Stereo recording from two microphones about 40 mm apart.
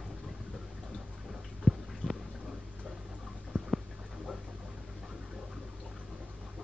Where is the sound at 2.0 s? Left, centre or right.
Left.